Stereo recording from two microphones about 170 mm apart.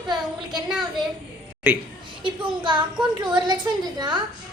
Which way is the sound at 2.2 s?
25° right (ahead or behind).